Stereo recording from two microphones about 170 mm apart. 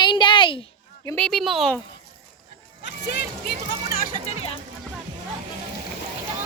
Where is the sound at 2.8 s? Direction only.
90° left.